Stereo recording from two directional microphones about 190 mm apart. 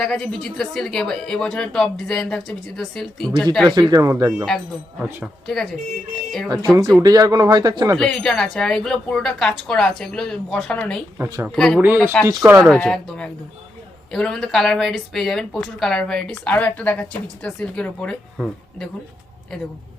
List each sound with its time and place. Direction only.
0.0 s speech: 5° left (ahead or behind)
3.7 s speech: 20° right (ahead or behind)
4.4 s speech: centre (ahead or behind)
6.7 s speech: 15° right (ahead or behind)
7.9 s speech: 5° left (ahead or behind)
11.2 s speech: 15° right (ahead or behind)
11.5 s speech: 5° left (ahead or behind)
11.8 s speech: 10° right (ahead or behind)
12.6 s speech: 5° left (ahead or behind)